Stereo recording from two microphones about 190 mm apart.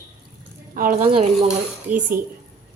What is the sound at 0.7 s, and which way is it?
Speech, 45° right (ahead or behind).